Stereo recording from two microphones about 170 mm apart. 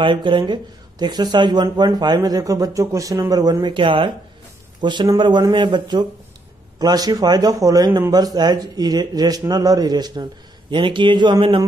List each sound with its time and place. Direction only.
0.0 s speech: 30° right (ahead or behind)